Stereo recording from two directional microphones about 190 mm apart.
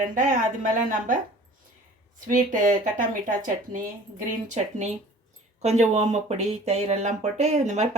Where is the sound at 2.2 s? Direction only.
45° right (ahead or behind).